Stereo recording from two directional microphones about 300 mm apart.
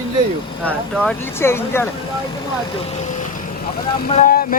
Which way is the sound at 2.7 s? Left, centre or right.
Centre.